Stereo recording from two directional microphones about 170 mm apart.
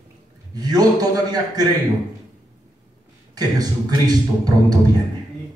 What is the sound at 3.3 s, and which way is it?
Speech, 25° right (ahead or behind).